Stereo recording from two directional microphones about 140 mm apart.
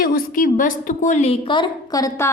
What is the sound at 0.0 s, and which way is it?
A woman's voice, 85° left.